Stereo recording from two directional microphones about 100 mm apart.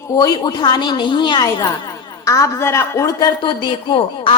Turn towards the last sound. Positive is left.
turn(degrees=55)  # may be behind; listen again after turning